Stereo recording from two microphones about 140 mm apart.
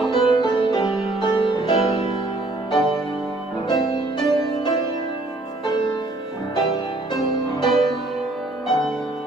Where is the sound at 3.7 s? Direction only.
30° left (ahead or behind).